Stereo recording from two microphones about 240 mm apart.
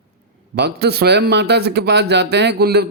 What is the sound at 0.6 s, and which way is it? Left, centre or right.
A man's voice, right.